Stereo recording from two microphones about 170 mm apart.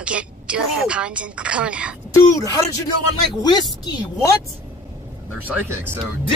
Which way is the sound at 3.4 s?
25° left (ahead or behind).